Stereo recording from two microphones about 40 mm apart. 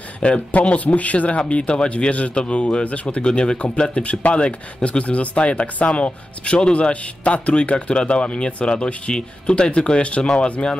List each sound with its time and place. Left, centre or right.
0.2 s speech: left